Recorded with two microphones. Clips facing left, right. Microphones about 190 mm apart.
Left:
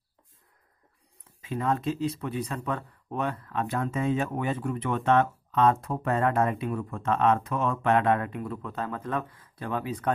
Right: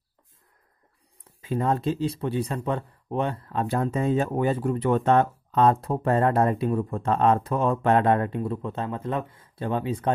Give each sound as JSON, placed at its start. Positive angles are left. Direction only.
{"t": 1.4, "sound": "speech", "side_deg": -35}